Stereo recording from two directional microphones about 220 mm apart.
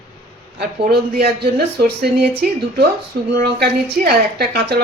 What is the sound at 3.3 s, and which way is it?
Speech, 45° right (ahead or behind).